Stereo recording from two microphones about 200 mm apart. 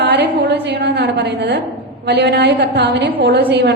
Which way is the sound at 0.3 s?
55° right (ahead or behind).